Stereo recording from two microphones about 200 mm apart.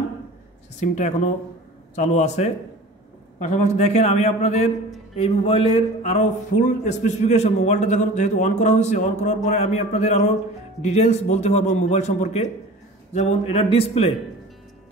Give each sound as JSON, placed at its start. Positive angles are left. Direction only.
{"t": 0.7, "sound": "a man's voice", "side_deg": 35}